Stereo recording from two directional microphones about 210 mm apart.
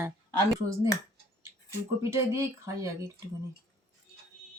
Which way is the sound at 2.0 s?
15° right (ahead or behind).